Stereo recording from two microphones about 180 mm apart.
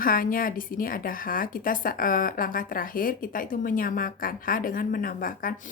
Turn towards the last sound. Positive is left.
turn(degrees=50)  # may be behind; listen again after turning